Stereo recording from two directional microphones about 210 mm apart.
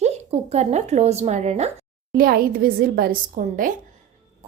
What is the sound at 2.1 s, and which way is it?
A woman's voice, 45° right (ahead or behind).